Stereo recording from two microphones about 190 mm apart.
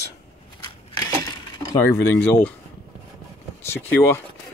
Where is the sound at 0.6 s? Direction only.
20° left (ahead or behind).